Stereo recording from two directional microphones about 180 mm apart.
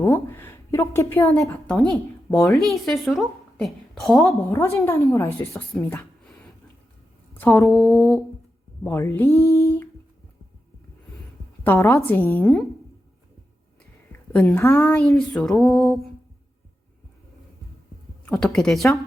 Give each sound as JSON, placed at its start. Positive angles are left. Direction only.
{"t": 0.0, "sound": "a woman's voice", "side_deg": 10}
{"t": 4.3, "sound": "a woman's voice", "side_deg": 15}
{"t": 7.3, "sound": "a woman's voice", "side_deg": 10}
{"t": 11.6, "sound": "a woman's voice", "side_deg": 15}
{"t": 14.3, "sound": "a woman's voice", "side_deg": 10}
{"t": 18.3, "sound": "a woman's voice", "side_deg": 5}